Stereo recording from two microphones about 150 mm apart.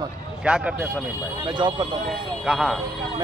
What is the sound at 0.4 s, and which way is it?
Speech, 5° right (ahead or behind).